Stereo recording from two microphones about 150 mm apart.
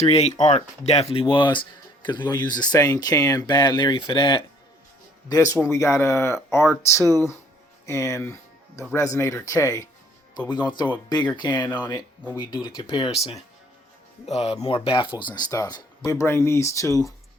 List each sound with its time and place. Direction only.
0.0 s speech: 45° left (ahead or behind)
5.3 s speech: 20° left (ahead or behind)
14.3 s speech: 45° left (ahead or behind); by 17.1 s 20° left (ahead or behind)